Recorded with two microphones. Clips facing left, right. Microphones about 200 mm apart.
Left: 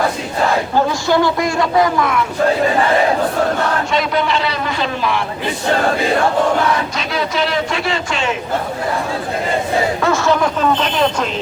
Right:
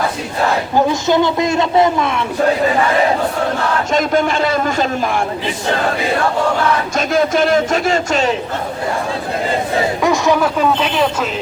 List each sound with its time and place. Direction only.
0.9 s a man's voice: 20° right (ahead or behind)
3.9 s a man's voice: 45° right (ahead or behind)
6.9 s a man's voice: 45° right (ahead or behind)
10.0 s speech: 15° right (ahead or behind)